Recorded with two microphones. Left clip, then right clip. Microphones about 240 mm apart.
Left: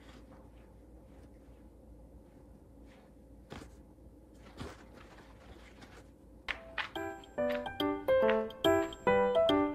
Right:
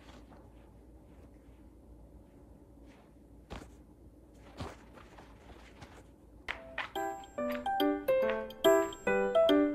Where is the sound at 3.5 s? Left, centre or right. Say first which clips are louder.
Right 1 dB; right.